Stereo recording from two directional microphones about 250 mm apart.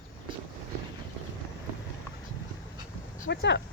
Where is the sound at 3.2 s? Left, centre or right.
Left.